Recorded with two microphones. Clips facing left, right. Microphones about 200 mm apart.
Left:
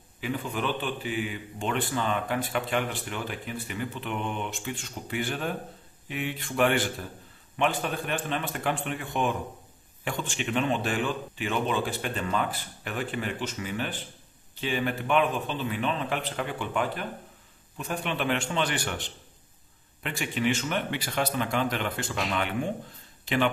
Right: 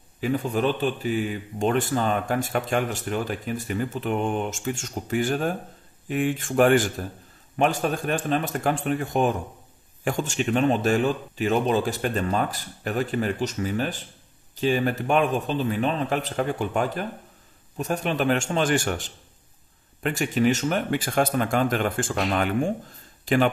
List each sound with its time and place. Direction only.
0.2 s a man's voice: 40° right (ahead or behind)